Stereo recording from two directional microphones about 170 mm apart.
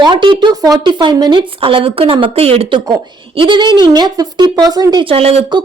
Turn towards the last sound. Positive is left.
turn(degrees=-35)  # may be behind; listen again after turning